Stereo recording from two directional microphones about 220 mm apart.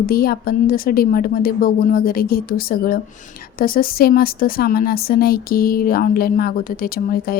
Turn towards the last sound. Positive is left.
turn(degrees=40)  # may be behind; listen again after turning